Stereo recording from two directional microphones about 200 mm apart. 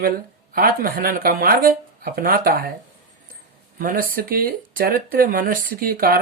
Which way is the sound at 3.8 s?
45° right (ahead or behind).